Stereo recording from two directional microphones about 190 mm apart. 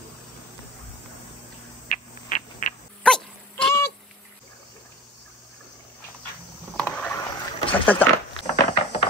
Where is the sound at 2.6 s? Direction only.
45° left (ahead or behind).